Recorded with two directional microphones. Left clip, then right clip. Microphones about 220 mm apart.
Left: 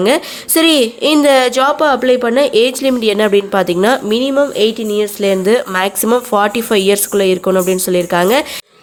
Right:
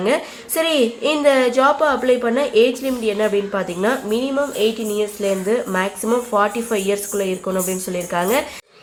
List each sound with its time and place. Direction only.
0.0 s a woman's voice: 45° left (ahead or behind)